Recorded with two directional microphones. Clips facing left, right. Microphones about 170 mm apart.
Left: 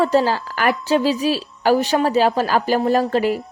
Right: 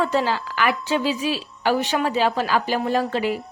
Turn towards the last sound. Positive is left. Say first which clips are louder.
# left 4 dB
turn(degrees=40)  # may be behind; listen again after turning